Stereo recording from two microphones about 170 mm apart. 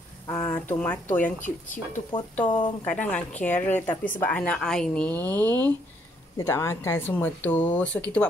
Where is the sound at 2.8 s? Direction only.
10° left (ahead or behind).